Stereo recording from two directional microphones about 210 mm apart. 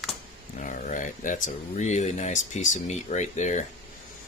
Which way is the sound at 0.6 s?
40° left (ahead or behind).